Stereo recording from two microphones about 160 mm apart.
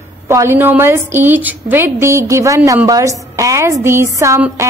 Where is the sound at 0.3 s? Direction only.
15° right (ahead or behind).